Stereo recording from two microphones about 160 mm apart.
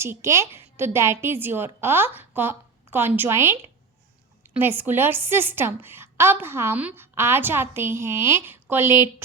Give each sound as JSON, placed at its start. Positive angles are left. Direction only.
{"t": 0.0, "sound": "a woman's voice", "side_deg": -15}